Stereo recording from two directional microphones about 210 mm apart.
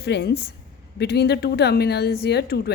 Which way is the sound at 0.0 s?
50° left (ahead or behind).